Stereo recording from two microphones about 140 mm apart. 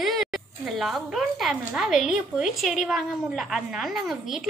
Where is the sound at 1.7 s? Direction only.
5° right (ahead or behind).